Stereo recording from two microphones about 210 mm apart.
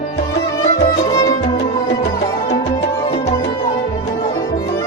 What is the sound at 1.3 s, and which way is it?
Music, 30° left (ahead or behind).